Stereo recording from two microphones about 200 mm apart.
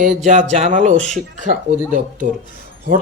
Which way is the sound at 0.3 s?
40° right (ahead or behind).